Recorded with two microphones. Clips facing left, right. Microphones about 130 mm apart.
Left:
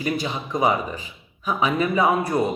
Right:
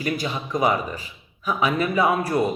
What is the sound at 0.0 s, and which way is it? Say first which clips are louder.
Speech: left 1 dB; 25° left (ahead or behind).